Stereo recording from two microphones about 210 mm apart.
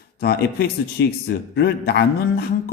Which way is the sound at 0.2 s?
50° left (ahead or behind).